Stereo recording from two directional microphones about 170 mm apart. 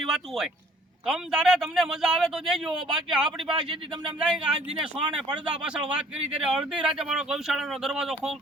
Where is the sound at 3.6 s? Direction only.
30° right (ahead or behind).